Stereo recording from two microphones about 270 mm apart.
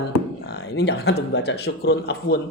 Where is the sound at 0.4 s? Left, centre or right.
Left.